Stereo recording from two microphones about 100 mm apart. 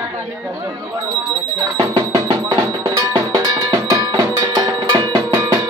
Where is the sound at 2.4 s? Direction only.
45° right (ahead or behind).